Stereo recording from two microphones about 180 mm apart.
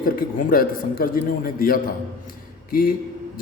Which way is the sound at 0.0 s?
55° left (ahead or behind).